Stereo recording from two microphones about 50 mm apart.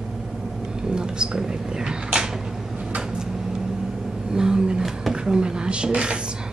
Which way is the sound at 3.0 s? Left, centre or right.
Centre.